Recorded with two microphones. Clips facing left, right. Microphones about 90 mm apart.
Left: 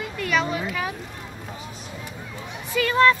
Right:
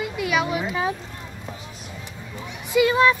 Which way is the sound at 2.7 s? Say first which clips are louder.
Right 1 dB; 15° right (ahead or behind).